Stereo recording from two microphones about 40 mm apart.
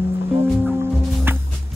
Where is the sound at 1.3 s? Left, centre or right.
Right.